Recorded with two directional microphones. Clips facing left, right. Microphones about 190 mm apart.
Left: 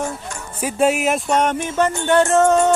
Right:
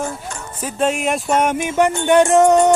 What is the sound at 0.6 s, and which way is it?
Music, 10° left (ahead or behind).